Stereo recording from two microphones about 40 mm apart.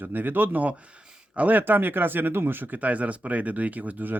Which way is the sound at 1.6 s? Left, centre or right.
Right.